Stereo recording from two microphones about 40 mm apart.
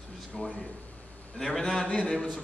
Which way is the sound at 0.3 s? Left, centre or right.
Centre.